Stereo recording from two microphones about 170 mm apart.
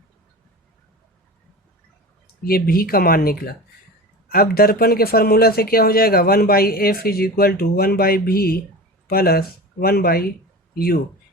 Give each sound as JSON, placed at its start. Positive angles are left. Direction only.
{"t": 2.4, "sound": "speech", "side_deg": 60}